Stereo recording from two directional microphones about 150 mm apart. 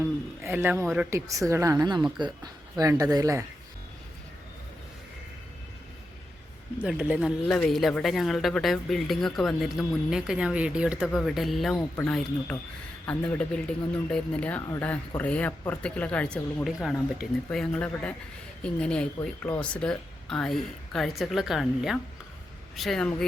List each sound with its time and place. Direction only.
0.0 s a man's voice: 15° right (ahead or behind)
6.7 s a man's voice: 5° right (ahead or behind)